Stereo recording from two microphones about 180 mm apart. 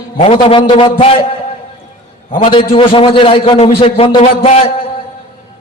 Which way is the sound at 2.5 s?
30° left (ahead or behind).